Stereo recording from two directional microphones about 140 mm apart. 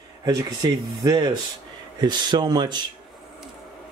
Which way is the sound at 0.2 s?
25° right (ahead or behind).